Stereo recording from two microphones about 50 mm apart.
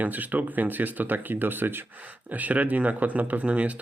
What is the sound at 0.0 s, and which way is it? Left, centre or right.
Speech, right.